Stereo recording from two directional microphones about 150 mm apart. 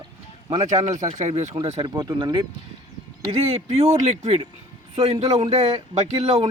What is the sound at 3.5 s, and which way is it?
Speech, 45° right (ahead or behind).